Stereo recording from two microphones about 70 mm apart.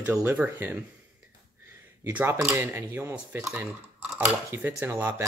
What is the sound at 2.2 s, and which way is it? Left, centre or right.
Speech, right.